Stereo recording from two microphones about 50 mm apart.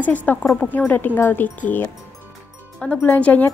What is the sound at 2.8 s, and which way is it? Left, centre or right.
Speech, left.